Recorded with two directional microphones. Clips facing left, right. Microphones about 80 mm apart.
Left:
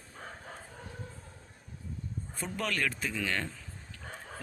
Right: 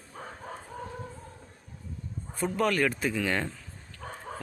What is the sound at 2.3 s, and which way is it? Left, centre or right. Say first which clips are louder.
Speech: right 8 dB; centre.